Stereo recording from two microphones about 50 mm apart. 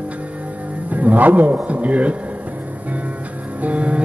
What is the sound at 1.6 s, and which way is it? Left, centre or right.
Music, right.